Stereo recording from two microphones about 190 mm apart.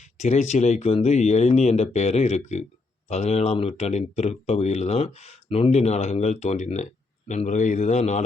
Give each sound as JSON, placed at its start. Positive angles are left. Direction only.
{"t": 0.0, "sound": "speech", "side_deg": 35}